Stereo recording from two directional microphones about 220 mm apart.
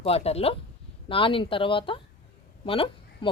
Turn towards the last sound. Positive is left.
turn(degrees=25)  # may be behind; listen again after turning